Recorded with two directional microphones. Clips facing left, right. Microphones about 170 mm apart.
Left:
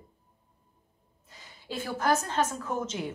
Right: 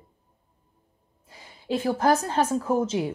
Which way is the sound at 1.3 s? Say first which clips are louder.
Right 9 dB; 30° right (ahead or behind).